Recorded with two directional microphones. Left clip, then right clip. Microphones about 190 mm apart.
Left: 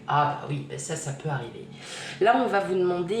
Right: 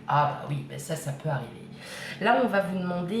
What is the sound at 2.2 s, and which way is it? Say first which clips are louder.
Speech: left 2 dB; 35° left (ahead or behind).